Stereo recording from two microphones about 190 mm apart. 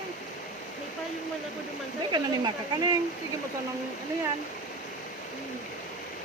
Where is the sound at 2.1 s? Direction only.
25° right (ahead or behind).